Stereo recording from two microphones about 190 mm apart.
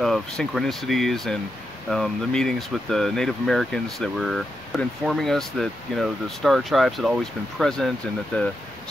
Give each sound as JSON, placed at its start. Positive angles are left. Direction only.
{"t": 0.0, "sound": "speech", "side_deg": 0}